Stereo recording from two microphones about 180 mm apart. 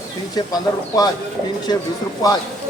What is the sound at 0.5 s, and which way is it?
Speech, 20° left (ahead or behind).